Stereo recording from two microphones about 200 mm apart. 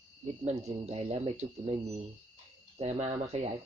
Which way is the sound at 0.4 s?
30° right (ahead or behind).